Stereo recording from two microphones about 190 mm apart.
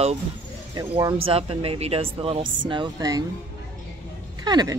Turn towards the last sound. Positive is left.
turn(degrees=-20)  # may be behind; listen again after turning